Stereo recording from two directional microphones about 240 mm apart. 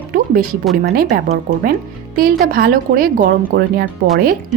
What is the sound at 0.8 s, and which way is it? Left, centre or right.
Speech, right.